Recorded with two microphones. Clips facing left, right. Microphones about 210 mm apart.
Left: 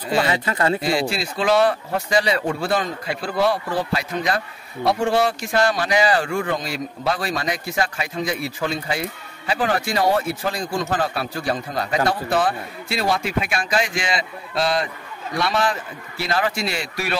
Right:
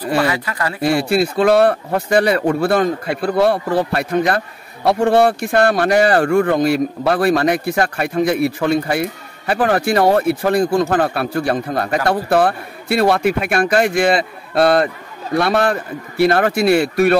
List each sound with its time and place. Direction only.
0.3 s speech: 25° left (ahead or behind)
0.8 s speech: 60° right (ahead or behind)